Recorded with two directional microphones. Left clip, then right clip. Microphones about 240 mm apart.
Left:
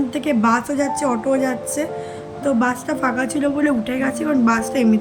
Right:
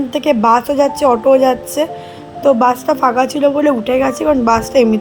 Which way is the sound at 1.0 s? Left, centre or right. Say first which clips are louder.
Right 12 dB; right.